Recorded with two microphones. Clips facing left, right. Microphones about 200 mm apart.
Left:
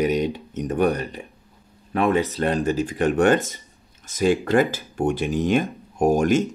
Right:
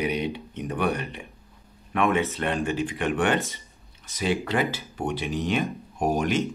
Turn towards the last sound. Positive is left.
turn(degrees=45)  # may be behind; listen again after turning